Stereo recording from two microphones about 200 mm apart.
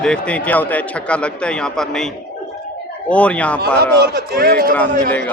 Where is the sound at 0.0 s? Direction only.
5° left (ahead or behind).